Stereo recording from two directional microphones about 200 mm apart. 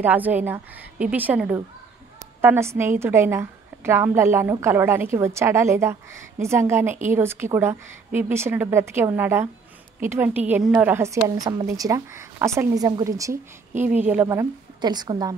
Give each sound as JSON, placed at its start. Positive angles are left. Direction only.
{"t": 0.0, "sound": "a woman's voice", "side_deg": -10}